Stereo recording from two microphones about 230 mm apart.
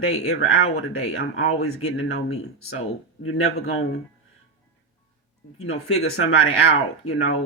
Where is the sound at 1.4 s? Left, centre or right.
Left.